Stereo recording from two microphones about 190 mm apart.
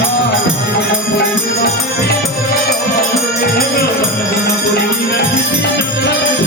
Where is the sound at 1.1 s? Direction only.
55° left (ahead or behind).